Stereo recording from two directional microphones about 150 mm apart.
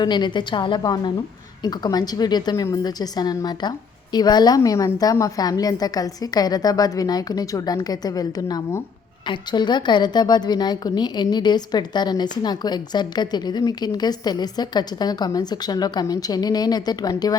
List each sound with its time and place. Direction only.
0.0 s a woman's voice: 30° left (ahead or behind)